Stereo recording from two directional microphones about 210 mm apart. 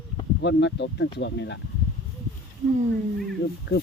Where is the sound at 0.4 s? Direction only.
55° left (ahead or behind).